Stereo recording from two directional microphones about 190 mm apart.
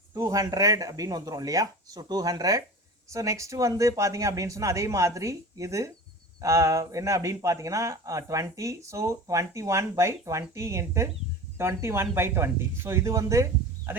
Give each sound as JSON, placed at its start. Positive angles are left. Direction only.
{"t": 0.1, "sound": "speech", "side_deg": -15}